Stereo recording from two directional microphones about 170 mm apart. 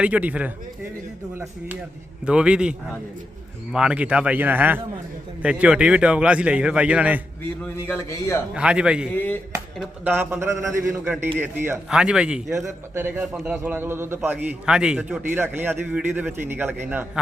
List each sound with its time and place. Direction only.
0.0 s a man's voice: 10° right (ahead or behind)
2.2 s a man's voice: 5° right (ahead or behind)
7.6 s a man's voice: 15° left (ahead or behind)
8.5 s speech: 5° right (ahead or behind)
9.1 s a man's voice: 10° left (ahead or behind)
10.0 s a man's voice: 10° right (ahead or behind)